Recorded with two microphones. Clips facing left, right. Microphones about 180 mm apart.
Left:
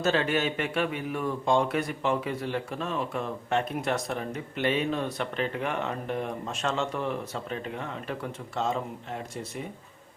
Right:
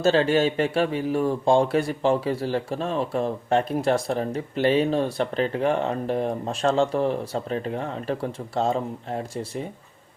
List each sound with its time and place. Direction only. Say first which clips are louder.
0.0 s speech: right 6 dB; 30° right (ahead or behind)